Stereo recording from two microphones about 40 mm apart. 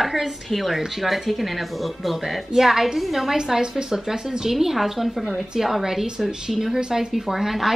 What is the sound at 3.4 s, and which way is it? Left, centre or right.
A woman's voice, centre.